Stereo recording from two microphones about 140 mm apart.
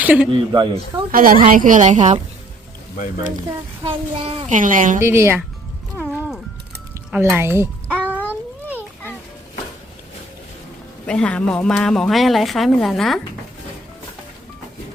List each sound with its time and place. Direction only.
0.0 s speech: 10° right (ahead or behind)
0.3 s speech: 35° right (ahead or behind)
1.1 s a woman's voice: 90° right; by 2.1 s 60° right (ahead or behind)
3.8 s speech: 45° right (ahead or behind)
4.4 s a woman's voice: 70° right (ahead or behind)
4.9 s speech: 20° right (ahead or behind)
6.1 s music: 5° right (ahead or behind)
7.1 s a sound: 10° right (ahead or behind)
11.0 s speech: 10° left (ahead or behind)